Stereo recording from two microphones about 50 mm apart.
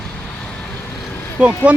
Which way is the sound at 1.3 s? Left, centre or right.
Right.